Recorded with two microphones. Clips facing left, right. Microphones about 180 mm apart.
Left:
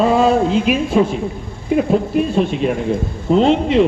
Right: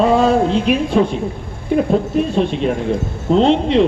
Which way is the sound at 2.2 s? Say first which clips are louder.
Even; 5° left (ahead or behind).